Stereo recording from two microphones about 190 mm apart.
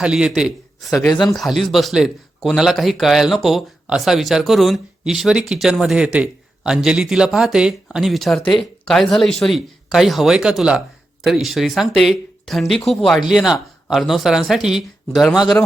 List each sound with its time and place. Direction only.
0.0 s a man's voice: 5° right (ahead or behind)
8.4 s speech: 25° left (ahead or behind)
8.8 s speech: centre (ahead or behind)